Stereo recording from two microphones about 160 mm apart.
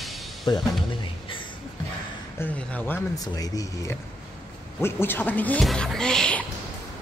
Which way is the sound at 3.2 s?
20° left (ahead or behind).